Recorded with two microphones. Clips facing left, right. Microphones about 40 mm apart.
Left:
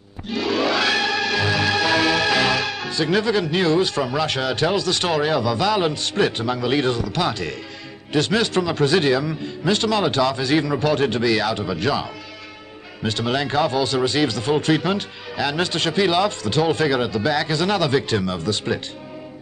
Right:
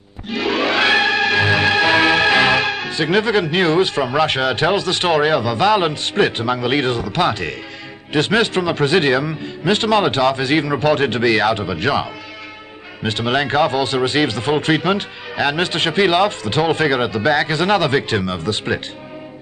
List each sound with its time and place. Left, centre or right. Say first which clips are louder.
0.3 s music: right 2 dB; right
8.1 s speech: right 3 dB; right